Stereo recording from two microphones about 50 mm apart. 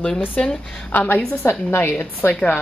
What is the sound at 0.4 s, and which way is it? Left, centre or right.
Speech, left.